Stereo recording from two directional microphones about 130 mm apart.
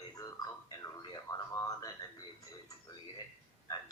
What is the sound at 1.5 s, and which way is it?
Speech, 25° left (ahead or behind).